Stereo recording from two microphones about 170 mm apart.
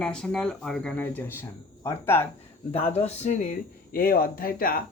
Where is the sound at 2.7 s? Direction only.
35° left (ahead or behind).